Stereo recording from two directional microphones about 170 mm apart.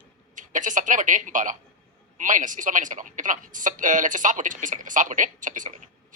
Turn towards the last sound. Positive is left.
turn(degrees=-50)  # may be behind; listen again after turning